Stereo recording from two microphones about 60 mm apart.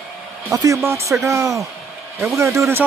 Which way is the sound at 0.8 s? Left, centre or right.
Right.